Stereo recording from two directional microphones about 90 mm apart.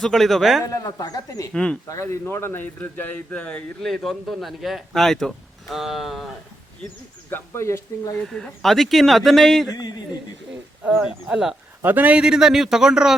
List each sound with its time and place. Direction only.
0.0 s speech: centre (ahead or behind)
0.6 s speech: 40° left (ahead or behind)
1.5 s speech: 10° left (ahead or behind)
1.9 s speech: 30° left (ahead or behind); by 3.9 s 15° left (ahead or behind)
3.9 s speech: centre (ahead or behind)
7.3 s speech: 25° left (ahead or behind)
8.2 s speech: 5° left (ahead or behind)
9.7 s speech: 45° left (ahead or behind)
11.3 s a man's voice: 10° right (ahead or behind)
11.8 s a man's voice: 20° right (ahead or behind)